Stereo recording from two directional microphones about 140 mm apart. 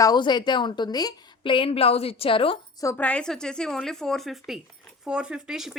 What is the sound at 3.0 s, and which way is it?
Speech, 10° left (ahead or behind).